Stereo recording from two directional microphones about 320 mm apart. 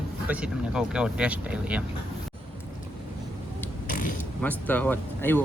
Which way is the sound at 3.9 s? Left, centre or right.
Left.